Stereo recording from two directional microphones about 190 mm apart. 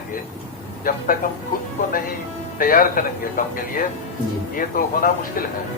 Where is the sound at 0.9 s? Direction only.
50° left (ahead or behind).